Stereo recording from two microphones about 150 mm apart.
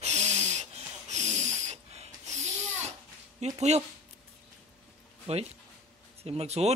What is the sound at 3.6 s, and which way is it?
Speech, 45° right (ahead or behind).